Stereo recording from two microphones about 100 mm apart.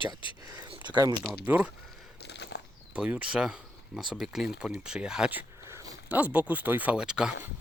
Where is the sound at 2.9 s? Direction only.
10° right (ahead or behind).